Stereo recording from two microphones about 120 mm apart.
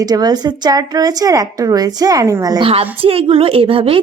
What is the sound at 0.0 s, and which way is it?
Speech, 35° right (ahead or behind).